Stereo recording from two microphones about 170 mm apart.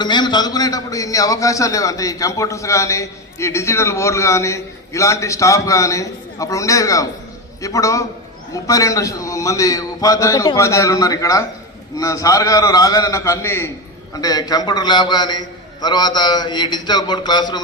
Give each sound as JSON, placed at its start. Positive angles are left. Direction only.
{"t": 0.0, "sound": "a man's voice", "side_deg": 25}